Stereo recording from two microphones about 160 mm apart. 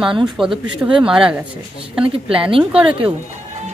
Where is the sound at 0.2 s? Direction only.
5° right (ahead or behind).